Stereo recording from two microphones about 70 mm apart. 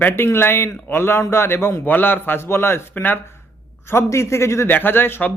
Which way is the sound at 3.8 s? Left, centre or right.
Left.